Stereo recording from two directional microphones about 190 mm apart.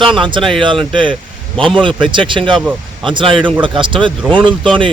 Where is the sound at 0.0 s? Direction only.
25° right (ahead or behind).